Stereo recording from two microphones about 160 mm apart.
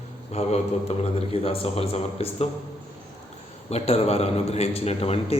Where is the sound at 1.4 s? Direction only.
35° left (ahead or behind).